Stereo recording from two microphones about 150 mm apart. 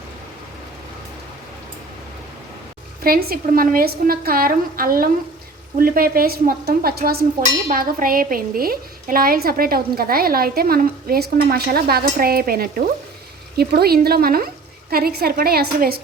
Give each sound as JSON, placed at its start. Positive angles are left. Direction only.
{"t": 3.0, "sound": "a woman's voice", "side_deg": -85}
{"t": 7.7, "sound": "a woman's voice", "side_deg": -70}